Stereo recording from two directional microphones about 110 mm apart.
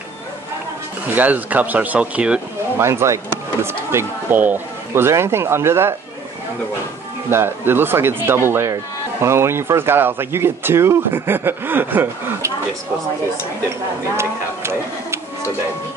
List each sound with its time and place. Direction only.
1.1 s speech: 15° right (ahead or behind)
2.8 s speech: 25° right (ahead or behind)
7.2 s speech: 20° right (ahead or behind)
14.1 s speech: 25° right (ahead or behind)